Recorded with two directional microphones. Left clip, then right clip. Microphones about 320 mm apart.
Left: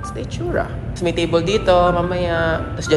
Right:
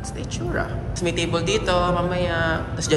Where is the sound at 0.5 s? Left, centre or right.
Centre.